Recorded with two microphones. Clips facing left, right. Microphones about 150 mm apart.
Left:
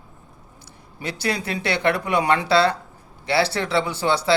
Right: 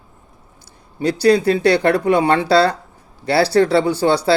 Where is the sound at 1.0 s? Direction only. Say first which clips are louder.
Right 12 dB; 35° right (ahead or behind).